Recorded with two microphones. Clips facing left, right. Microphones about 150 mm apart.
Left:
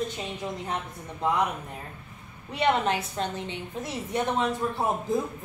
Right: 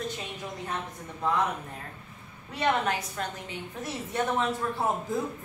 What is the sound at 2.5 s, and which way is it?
A woman's voice, 20° left (ahead or behind).